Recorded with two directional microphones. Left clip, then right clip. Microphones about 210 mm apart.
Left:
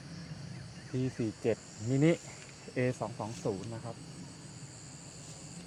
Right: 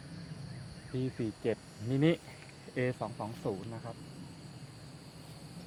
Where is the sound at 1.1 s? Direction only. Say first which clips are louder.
Left 2 dB; 45° left (ahead or behind).